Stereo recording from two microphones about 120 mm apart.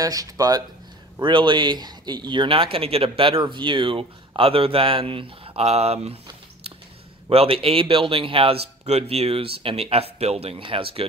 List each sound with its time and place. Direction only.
0.0 s speech: 30° right (ahead or behind)
1.2 s speech: 40° right (ahead or behind); by 6.1 s 60° right (ahead or behind)
7.2 s speech: 55° right (ahead or behind)